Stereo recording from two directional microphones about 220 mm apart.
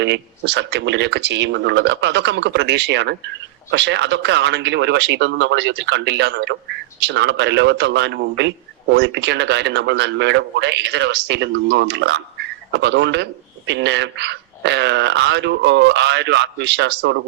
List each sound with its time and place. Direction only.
0.0 s speech: 55° right (ahead or behind)